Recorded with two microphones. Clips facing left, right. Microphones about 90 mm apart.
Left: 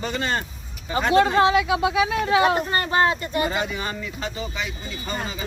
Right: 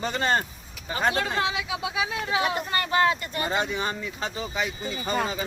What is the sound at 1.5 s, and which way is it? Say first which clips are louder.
Speech: left 10 dB; 60° left (ahead or behind).